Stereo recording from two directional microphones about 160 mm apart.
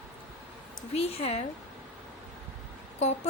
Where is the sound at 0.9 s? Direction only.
40° left (ahead or behind).